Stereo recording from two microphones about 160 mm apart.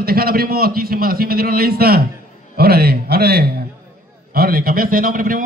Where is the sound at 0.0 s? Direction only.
70° right (ahead or behind).